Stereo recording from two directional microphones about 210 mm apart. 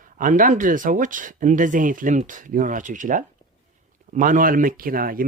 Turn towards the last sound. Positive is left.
turn(degrees=-45)  # may be behind; listen again after turning